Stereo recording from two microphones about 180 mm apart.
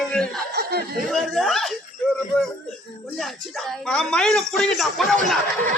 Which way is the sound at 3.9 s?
5° left (ahead or behind).